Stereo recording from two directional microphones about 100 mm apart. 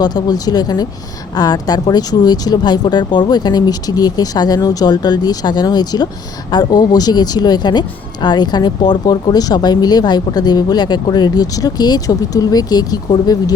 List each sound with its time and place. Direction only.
0.0 s speech: 45° left (ahead or behind)